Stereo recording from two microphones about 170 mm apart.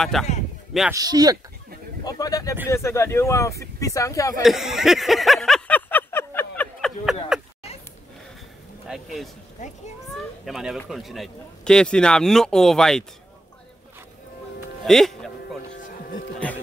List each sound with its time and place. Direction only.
0.0 s speech: centre (ahead or behind)
0.9 s speech: 20° right (ahead or behind)
2.0 s speech: 20° left (ahead or behind)
4.4 s a sound: centre (ahead or behind)
8.8 s speech: centre (ahead or behind)
9.6 s a child's voice: 45° left (ahead or behind)
10.1 s speech: centre (ahead or behind)
14.9 s music: centre (ahead or behind)